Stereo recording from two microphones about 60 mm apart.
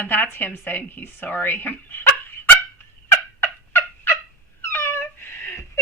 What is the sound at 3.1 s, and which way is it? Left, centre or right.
Turkey, left.